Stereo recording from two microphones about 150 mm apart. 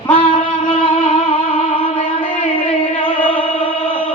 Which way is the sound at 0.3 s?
10° left (ahead or behind).